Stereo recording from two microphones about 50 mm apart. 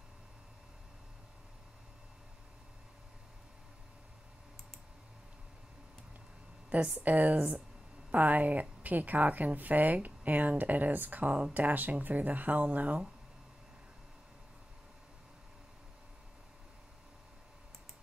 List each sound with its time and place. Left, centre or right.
6.7 s a woman's voice: right